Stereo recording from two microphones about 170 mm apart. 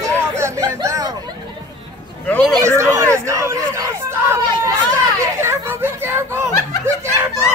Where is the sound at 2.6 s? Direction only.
15° right (ahead or behind).